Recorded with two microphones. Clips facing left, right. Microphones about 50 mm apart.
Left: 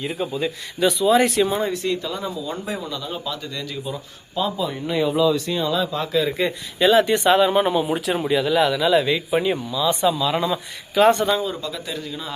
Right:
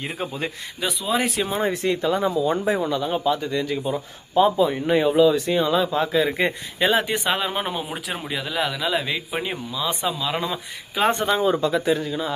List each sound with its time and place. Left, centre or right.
0.0 s speech: right
0.8 s speech: centre
1.6 s speech: right
7.0 s speech: centre
11.1 s speech: right
12.0 s speech: centre